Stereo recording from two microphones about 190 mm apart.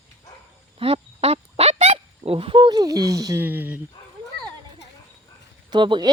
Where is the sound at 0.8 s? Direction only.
30° right (ahead or behind); by 3.8 s 10° right (ahead or behind).